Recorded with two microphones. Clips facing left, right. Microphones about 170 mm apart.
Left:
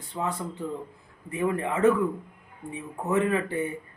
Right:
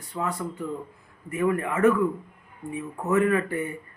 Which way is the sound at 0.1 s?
20° left (ahead or behind).